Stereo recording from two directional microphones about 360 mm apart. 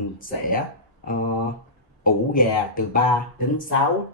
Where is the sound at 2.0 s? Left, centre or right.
Left.